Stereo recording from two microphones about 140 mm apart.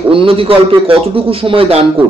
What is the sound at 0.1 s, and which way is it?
Speech, 40° right (ahead or behind).